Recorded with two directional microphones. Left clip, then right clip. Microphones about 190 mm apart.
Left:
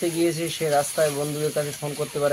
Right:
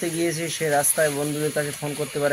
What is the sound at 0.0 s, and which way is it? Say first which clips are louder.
Speech: left 2 dB; centre (ahead or behind).